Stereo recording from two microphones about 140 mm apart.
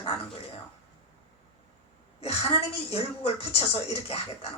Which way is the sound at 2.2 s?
45° left (ahead or behind).